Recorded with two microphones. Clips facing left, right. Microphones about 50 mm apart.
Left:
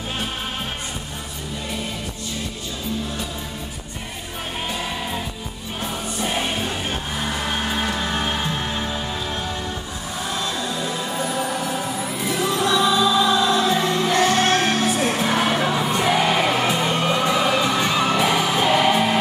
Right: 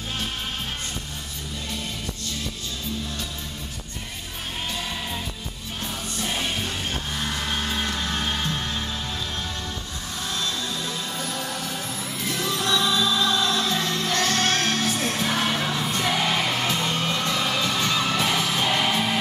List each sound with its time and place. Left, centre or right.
6.1 s music: centre
10.3 s music: centre